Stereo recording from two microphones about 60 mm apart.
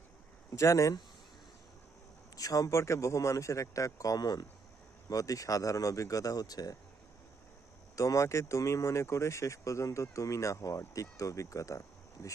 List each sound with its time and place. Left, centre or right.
0.5 s speech: left
2.3 s a man's voice: left
2.7 s speech: left
5.0 s speech: left
7.9 s speech: left